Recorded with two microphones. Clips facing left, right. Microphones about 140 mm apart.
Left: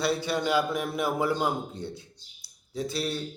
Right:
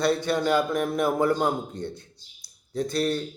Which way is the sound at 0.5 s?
45° right (ahead or behind).